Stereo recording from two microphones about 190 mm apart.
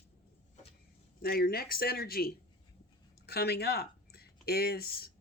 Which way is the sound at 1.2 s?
55° left (ahead or behind).